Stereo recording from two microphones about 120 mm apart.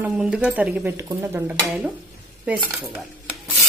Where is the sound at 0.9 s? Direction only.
25° right (ahead or behind).